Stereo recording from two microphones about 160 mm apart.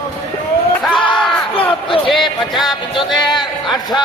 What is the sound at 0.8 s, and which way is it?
A man's voice, centre (ahead or behind).